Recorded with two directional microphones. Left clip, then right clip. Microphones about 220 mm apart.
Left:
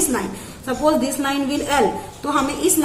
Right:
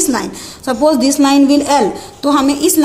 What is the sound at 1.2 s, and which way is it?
A woman's voice, 50° right (ahead or behind).